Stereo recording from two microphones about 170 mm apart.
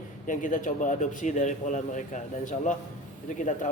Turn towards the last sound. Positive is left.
turn(degrees=50)  # may be behind; listen again after turning